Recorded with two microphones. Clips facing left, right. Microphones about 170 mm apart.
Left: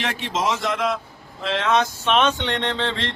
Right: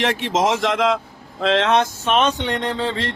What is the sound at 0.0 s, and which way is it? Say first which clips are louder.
A man's voice: right 5 dB; 65° right (ahead or behind).